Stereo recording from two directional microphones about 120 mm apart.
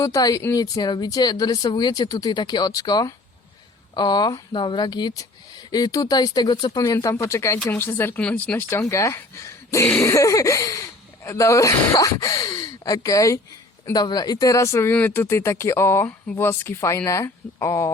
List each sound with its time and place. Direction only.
0.0 s speech: 30° left (ahead or behind); by 8.6 s 10° left (ahead or behind)
8.7 s speech: 25° left (ahead or behind)